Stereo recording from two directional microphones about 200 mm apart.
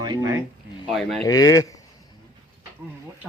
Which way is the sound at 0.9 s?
Centre (ahead or behind).